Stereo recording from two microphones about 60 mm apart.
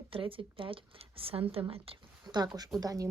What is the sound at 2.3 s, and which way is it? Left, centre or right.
Speech, right.